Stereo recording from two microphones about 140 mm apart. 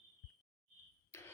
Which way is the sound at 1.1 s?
20° left (ahead or behind).